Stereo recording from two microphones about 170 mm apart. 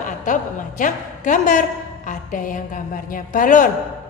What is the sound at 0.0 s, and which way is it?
A woman's voice, 50° left (ahead or behind).